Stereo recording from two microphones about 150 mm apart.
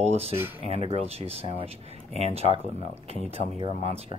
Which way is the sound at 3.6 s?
50° left (ahead or behind).